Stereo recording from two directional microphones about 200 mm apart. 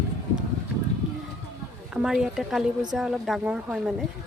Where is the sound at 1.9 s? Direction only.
5° right (ahead or behind).